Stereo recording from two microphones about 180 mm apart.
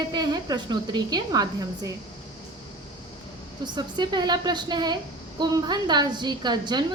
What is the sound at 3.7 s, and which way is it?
A woman's voice, 25° right (ahead or behind).